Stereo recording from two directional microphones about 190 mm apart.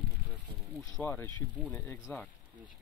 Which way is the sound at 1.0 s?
10° left (ahead or behind).